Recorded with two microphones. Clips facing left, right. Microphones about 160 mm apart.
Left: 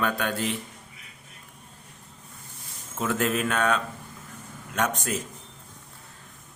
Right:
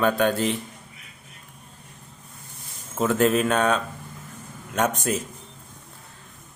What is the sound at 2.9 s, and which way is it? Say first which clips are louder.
Speech: right 6 dB; 30° right (ahead or behind).